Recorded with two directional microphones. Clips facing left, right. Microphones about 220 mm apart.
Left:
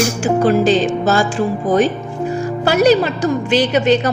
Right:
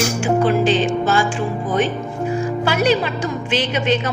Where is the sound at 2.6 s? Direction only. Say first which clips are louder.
Left 7 dB; 40° left (ahead or behind).